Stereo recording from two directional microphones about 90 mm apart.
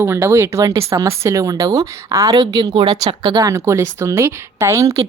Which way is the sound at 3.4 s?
35° right (ahead or behind).